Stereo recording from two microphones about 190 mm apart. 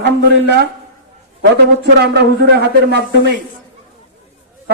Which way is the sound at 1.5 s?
60° right (ahead or behind).